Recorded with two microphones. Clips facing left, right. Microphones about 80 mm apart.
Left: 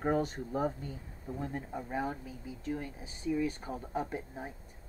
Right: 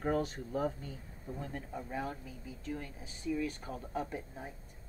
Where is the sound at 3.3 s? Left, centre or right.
Centre.